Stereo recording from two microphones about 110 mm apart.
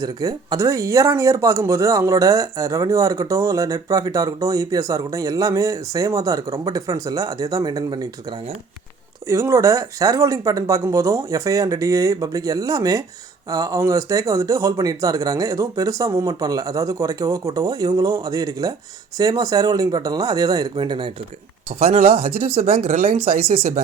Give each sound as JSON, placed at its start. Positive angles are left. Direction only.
{"t": 0.0, "sound": "speech", "side_deg": -35}
{"t": 9.2, "sound": "speech", "side_deg": -30}
{"t": 21.8, "sound": "speech", "side_deg": -75}